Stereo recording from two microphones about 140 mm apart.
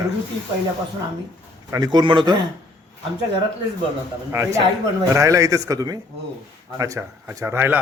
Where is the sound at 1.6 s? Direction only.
25° right (ahead or behind).